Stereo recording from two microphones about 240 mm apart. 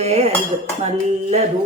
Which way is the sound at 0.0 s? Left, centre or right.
Right.